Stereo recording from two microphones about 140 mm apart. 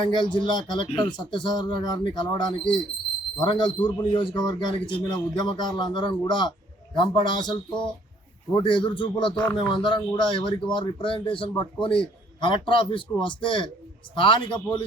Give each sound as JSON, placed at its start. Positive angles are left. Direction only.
{"t": 0.0, "sound": "a man's voice", "side_deg": 35}